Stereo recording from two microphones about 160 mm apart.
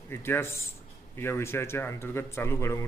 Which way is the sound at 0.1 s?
15° left (ahead or behind).